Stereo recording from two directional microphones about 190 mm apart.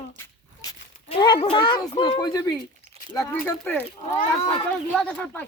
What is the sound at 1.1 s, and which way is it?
Speech, 25° left (ahead or behind).